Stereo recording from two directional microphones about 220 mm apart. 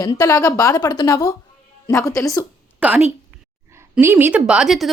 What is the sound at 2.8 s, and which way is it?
A woman's voice, 5° right (ahead or behind).